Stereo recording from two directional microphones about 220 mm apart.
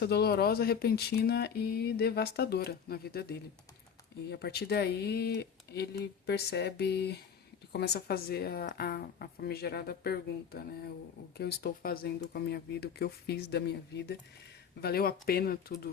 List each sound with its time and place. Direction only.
0.0 s speech: 45° left (ahead or behind)